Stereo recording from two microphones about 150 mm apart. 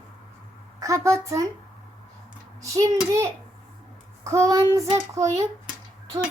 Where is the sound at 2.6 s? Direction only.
20° right (ahead or behind).